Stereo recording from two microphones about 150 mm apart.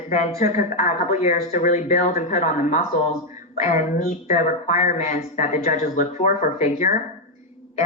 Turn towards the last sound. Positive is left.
turn(degrees=55)  # may be behind; listen again after turning